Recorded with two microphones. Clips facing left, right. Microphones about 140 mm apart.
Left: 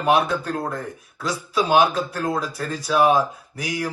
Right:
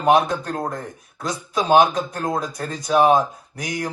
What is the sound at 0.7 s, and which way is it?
Speech, 45° right (ahead or behind).